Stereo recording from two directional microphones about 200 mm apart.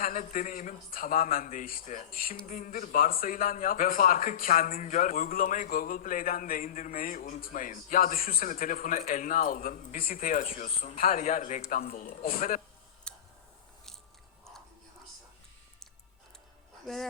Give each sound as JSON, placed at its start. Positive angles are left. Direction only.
{"t": 0.0, "sound": "a man's voice", "side_deg": 40}
{"t": 13.1, "sound": "tick", "side_deg": 5}
{"t": 16.8, "sound": "speech", "side_deg": 0}